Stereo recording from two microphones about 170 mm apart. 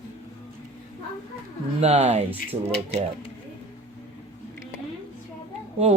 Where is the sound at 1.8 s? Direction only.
40° right (ahead or behind).